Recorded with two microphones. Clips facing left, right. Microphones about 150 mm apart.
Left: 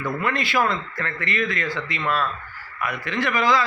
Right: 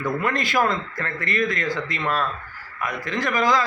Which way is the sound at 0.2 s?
45° right (ahead or behind).